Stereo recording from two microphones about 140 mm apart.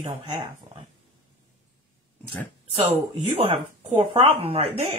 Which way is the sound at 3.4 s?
45° right (ahead or behind).